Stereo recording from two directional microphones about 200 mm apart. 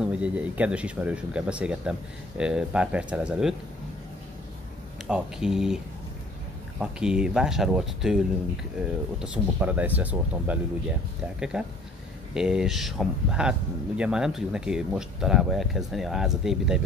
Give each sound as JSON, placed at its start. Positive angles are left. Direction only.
{"t": 0.0, "sound": "speech", "side_deg": -5}
{"t": 5.0, "sound": "speech", "side_deg": -5}
{"t": 6.8, "sound": "speech", "side_deg": -5}